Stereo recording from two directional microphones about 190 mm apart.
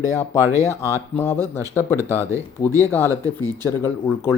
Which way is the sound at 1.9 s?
15° right (ahead or behind).